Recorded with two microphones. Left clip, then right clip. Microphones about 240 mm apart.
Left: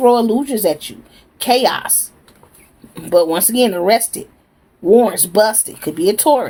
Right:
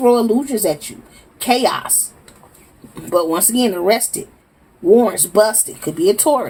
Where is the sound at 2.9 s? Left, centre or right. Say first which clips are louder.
Left 3 dB; left.